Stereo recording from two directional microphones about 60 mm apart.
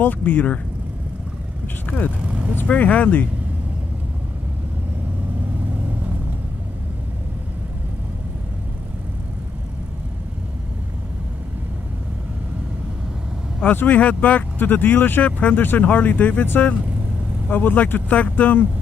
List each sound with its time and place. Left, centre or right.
0.0 s speech: left
1.9 s speech: left
2.2 s vehicle: centre
2.5 s speech: left
5.7 s vehicle: right
13.7 s speech: left